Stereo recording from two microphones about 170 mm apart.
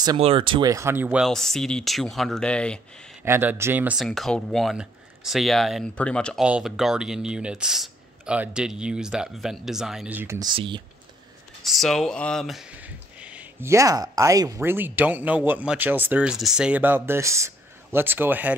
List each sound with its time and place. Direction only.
0.2 s speech: 30° right (ahead or behind); by 2.8 s 5° left (ahead or behind)
3.3 s speech: 15° right (ahead or behind)
4.0 s speech: centre (ahead or behind); by 10.5 s 15° right (ahead or behind)
10.5 s speech: 30° right (ahead or behind)
11.6 s speech: centre (ahead or behind)